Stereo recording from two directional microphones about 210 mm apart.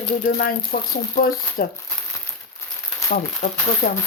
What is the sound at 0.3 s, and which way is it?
Speech, 45° left (ahead or behind).